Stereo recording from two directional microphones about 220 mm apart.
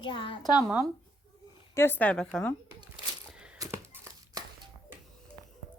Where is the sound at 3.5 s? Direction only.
10° right (ahead or behind).